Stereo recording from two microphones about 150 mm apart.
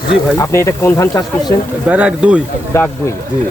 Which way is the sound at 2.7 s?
20° left (ahead or behind).